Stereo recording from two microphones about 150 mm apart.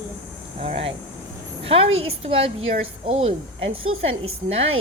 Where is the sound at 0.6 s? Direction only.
40° right (ahead or behind).